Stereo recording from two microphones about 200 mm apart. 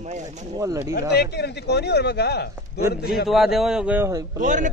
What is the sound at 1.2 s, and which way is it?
Speech, 55° left (ahead or behind).